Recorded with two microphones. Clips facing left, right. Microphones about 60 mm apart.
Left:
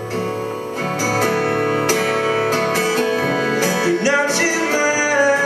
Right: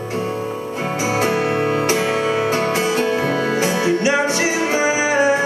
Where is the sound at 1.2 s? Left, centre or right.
Left.